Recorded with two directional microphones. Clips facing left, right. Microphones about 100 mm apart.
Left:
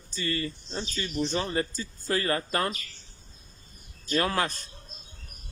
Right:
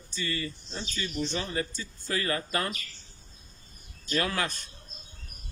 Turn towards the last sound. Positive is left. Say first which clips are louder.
# left 3 dB
turn(degrees=35)  # may be behind; listen again after turning